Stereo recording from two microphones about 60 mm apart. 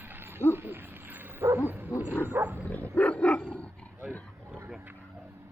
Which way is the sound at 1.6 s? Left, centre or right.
Right.